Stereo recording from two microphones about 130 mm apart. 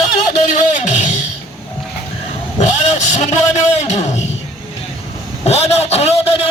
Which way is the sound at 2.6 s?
65° left (ahead or behind).